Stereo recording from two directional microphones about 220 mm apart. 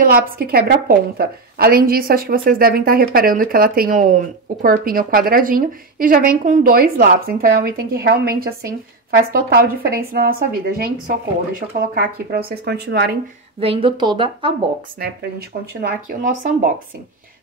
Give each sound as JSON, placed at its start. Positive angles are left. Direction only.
{"t": 0.4, "sound": "a woman's voice", "side_deg": -45}
{"t": 11.9, "sound": "speech", "side_deg": -45}
{"t": 13.6, "sound": "a woman's voice", "side_deg": -25}
{"t": 15.0, "sound": "a woman's voice", "side_deg": -45}